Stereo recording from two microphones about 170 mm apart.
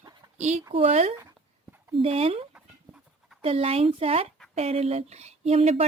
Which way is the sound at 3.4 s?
35° right (ahead or behind).